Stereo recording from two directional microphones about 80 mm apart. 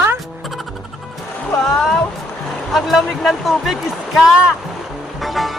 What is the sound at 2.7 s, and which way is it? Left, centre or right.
Speech, centre.